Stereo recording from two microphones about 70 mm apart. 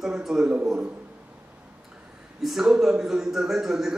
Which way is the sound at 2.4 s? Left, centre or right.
Centre.